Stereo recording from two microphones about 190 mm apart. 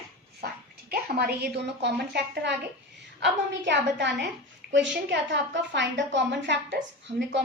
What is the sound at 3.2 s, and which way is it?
A woman's voice, 70° right (ahead or behind).